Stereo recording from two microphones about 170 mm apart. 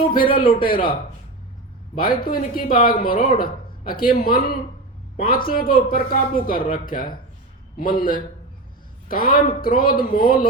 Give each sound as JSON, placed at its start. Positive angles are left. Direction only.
{"t": 0.3, "sound": "a man's voice", "side_deg": 30}
{"t": 0.6, "sound": "speech", "side_deg": 55}
{"t": 2.0, "sound": "speech", "side_deg": 55}